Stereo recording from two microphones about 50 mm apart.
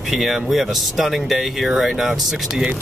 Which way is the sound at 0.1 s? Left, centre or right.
Centre.